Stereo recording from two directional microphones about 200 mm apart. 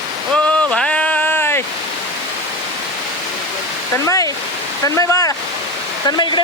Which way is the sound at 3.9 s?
15° left (ahead or behind).